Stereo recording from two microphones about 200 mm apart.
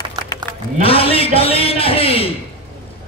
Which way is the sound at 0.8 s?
30° left (ahead or behind).